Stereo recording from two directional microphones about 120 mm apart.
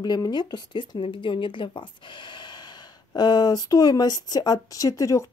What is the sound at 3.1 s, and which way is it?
Speech, 35° left (ahead or behind).